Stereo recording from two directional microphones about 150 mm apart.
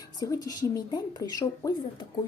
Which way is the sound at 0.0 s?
25° left (ahead or behind).